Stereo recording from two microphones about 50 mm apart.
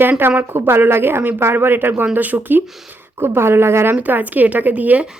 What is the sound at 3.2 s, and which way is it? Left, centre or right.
Speech, right.